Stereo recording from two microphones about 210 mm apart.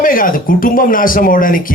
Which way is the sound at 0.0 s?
40° left (ahead or behind).